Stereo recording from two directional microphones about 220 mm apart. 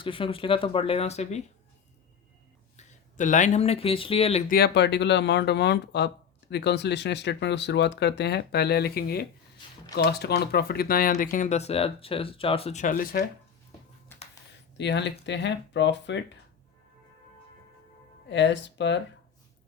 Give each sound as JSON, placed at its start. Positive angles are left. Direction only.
{"t": 0.0, "sound": "speech", "side_deg": 25}
{"t": 2.7, "sound": "speech", "side_deg": 35}
{"t": 4.4, "sound": "speech", "side_deg": 45}
{"t": 14.8, "sound": "speech", "side_deg": 50}
{"t": 18.3, "sound": "speech", "side_deg": 55}